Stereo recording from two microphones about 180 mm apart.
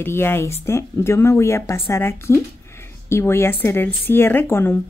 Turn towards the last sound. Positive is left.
turn(degrees=10)  # may be behind; listen again after turning